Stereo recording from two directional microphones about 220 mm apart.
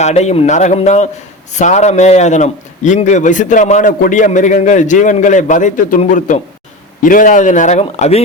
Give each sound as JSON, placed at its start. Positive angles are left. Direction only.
{"t": 0.0, "sound": "a man's voice", "side_deg": 30}